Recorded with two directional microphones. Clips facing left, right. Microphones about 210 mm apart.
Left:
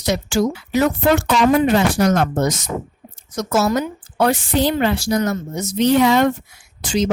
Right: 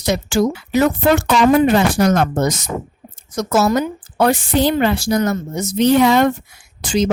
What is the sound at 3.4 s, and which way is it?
A woman's voice, 55° right (ahead or behind).